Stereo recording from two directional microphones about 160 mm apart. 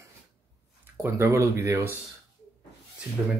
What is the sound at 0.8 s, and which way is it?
Speech, 15° right (ahead or behind).